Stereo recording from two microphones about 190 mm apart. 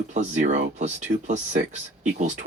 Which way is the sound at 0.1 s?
40° right (ahead or behind).